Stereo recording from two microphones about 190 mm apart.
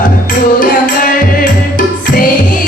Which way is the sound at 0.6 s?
45° left (ahead or behind).